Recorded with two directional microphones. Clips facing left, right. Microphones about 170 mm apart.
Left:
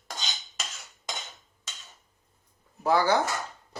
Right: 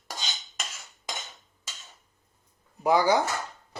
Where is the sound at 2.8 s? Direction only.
15° right (ahead or behind).